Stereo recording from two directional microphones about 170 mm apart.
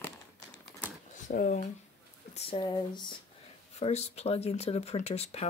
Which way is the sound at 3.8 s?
40° left (ahead or behind).